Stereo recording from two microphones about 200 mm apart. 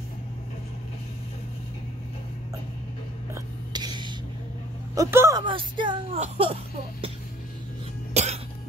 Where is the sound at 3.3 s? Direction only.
20° right (ahead or behind).